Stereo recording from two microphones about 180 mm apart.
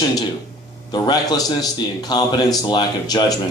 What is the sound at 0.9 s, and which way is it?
A man's voice, 20° left (ahead or behind).